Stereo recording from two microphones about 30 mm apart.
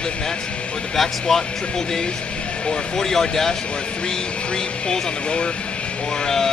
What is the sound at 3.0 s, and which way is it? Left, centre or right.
Speech, centre.